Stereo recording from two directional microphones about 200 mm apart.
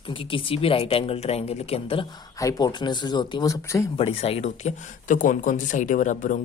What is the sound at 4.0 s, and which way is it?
Speech, 30° left (ahead or behind).